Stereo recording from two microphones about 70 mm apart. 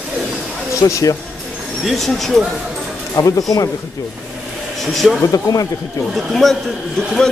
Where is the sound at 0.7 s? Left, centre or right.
Left.